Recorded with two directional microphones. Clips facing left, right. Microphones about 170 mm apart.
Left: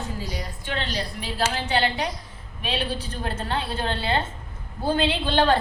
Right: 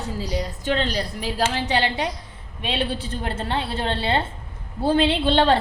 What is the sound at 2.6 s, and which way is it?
A woman's voice, 25° right (ahead or behind).